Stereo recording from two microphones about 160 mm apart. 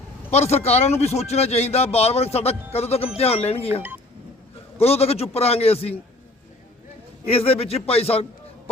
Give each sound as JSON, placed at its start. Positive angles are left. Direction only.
{"t": 0.3, "sound": "a man's voice", "side_deg": 40}
{"t": 7.3, "sound": "a man's voice", "side_deg": 40}